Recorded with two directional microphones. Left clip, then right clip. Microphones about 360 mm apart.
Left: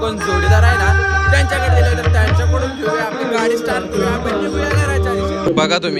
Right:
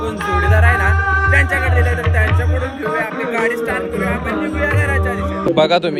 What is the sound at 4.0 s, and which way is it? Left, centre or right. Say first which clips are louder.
Music: left 2 dB; centre.